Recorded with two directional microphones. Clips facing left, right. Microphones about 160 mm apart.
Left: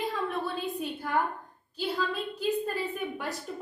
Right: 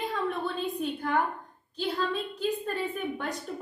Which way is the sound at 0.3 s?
5° left (ahead or behind).